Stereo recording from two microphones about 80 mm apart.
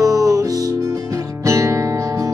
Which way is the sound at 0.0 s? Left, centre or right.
Right.